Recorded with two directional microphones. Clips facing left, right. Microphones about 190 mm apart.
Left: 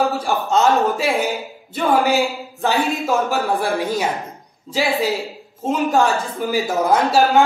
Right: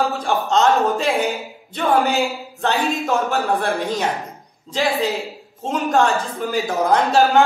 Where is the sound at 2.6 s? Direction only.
Centre (ahead or behind).